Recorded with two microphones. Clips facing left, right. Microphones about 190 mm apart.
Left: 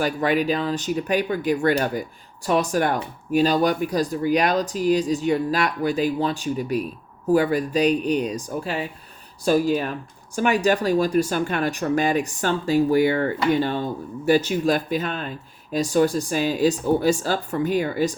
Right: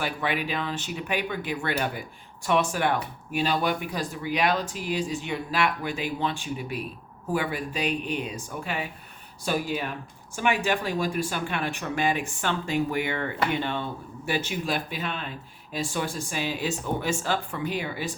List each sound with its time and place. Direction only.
0.0 s speech: 40° left (ahead or behind)